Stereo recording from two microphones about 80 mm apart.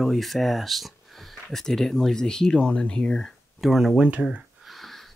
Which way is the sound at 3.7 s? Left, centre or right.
Centre.